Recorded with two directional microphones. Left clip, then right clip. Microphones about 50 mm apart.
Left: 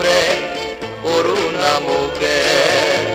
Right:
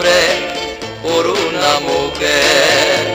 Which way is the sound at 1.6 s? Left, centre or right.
Left.